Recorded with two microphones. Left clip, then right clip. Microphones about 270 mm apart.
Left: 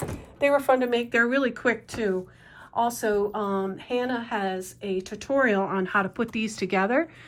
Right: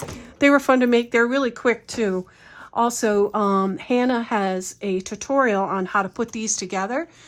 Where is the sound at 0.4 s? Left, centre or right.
Right.